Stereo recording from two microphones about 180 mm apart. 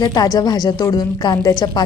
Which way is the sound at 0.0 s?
20° left (ahead or behind).